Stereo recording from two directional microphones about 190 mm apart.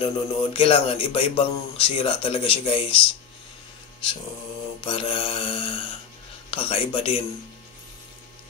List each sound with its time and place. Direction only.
0.0 s speech: 30° left (ahead or behind)
4.8 s speech: 30° left (ahead or behind)